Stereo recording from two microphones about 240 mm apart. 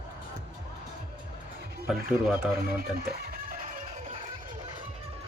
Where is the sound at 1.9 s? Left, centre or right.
Centre.